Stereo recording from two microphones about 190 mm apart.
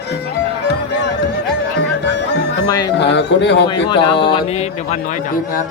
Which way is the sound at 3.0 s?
65° left (ahead or behind).